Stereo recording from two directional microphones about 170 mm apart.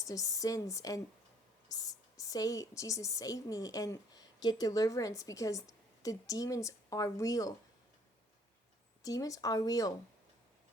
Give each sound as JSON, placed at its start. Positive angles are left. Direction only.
{"t": 0.1, "sound": "a woman's voice", "side_deg": 20}
{"t": 9.0, "sound": "a woman's voice", "side_deg": 20}